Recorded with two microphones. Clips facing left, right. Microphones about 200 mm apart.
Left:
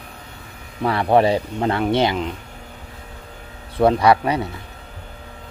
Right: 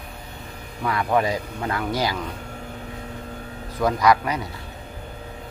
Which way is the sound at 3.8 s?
30° left (ahead or behind).